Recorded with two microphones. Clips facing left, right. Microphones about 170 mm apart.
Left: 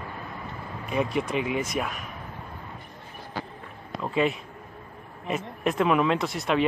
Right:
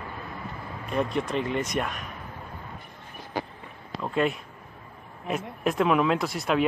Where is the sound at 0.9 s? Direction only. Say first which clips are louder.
Left 1 dB; 5° left (ahead or behind).